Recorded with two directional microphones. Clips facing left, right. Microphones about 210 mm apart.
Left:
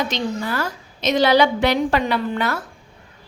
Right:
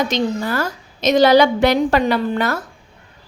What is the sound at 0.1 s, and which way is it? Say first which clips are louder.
A woman's voice: right 4 dB; 45° right (ahead or behind).